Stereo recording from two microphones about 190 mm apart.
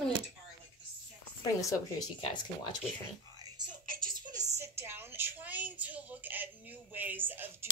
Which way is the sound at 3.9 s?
50° right (ahead or behind).